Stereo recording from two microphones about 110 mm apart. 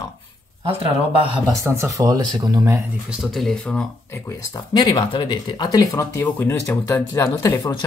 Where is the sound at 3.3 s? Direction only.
5° left (ahead or behind).